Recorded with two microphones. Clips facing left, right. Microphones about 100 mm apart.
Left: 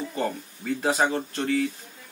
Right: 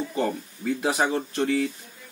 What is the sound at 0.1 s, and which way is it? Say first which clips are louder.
A man's voice: right 2 dB; 10° right (ahead or behind).